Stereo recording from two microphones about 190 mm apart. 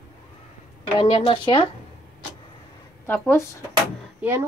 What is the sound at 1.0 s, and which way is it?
Speech, 30° left (ahead or behind).